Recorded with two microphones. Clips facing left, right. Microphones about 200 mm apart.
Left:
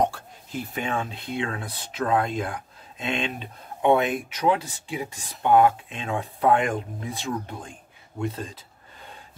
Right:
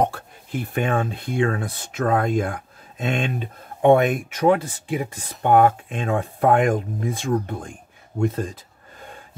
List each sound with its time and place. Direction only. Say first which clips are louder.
0.0 s speech: right 2 dB; 55° right (ahead or behind)